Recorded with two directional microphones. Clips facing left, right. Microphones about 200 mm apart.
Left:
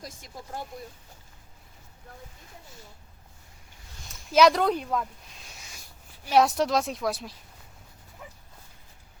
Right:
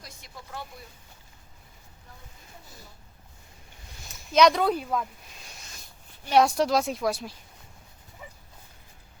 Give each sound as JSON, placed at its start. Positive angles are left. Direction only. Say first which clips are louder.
{"t": 0.0, "sound": "vehicle", "louder": "left 4 dB", "side_deg": 45}
{"t": 4.1, "sound": "a sound", "louder": "even", "side_deg": 5}
{"t": 6.2, "sound": "a woman's voice", "louder": "right 1 dB", "side_deg": 0}
{"t": 8.2, "sound": "dog", "louder": "even", "side_deg": 0}